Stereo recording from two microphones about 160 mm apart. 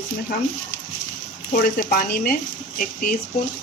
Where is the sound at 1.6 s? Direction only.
65° left (ahead or behind).